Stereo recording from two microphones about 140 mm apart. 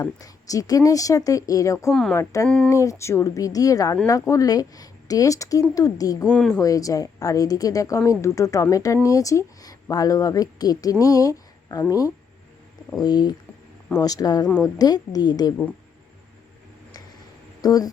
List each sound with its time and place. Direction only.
0.0 s a woman's voice: 25° left (ahead or behind)
1.9 s speech: 5° left (ahead or behind)
2.1 s a woman's voice: 25° left (ahead or behind)
6.2 s speech: 5° left (ahead or behind)
6.6 s a woman's voice: 25° left (ahead or behind)
17.6 s speech: 30° left (ahead or behind)